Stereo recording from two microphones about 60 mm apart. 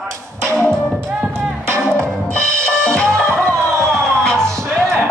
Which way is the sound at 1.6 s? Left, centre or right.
Right.